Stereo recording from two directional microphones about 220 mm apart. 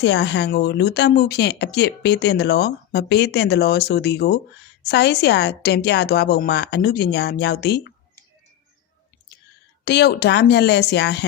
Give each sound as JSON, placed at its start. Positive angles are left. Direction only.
{"t": 0.0, "sound": "speech", "side_deg": 50}
{"t": 9.8, "sound": "speech", "side_deg": 50}